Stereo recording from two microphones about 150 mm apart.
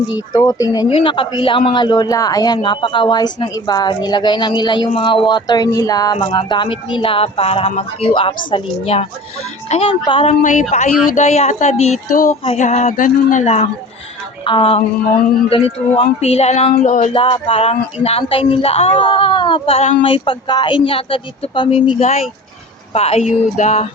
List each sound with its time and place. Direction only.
0.1 s a man's voice: 25° left (ahead or behind)
10.4 s speech: 55° left (ahead or behind)
12.0 s speech: 70° left (ahead or behind)
12.5 s speech: 55° left (ahead or behind)
17.2 s speech: 35° left (ahead or behind)
22.9 s speech: 40° left (ahead or behind)